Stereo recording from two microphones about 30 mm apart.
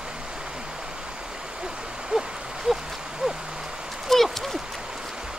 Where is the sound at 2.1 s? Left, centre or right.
Right.